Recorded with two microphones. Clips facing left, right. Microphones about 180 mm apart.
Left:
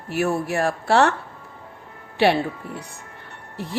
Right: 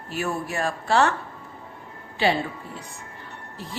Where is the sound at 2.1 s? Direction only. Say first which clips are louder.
Left 4 dB; 65° left (ahead or behind).